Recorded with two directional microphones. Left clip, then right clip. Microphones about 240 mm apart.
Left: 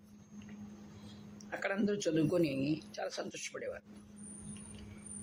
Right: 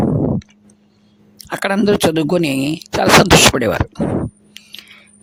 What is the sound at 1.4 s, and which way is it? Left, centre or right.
A man's voice, right.